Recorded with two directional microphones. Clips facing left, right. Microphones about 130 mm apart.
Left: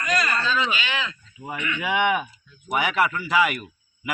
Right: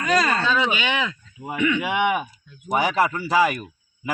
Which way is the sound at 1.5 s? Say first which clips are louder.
Right 4 dB; 5° right (ahead or behind).